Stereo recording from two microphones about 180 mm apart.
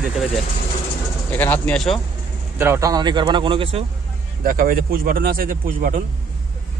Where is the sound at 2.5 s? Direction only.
15° right (ahead or behind).